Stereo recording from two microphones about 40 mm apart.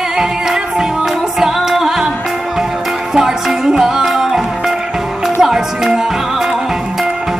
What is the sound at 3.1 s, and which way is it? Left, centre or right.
Music, centre.